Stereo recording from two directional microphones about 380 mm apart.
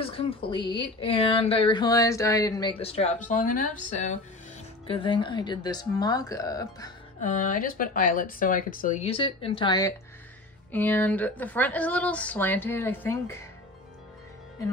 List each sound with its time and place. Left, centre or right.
0.0 s a woman's voice: centre
7.2 s speech: centre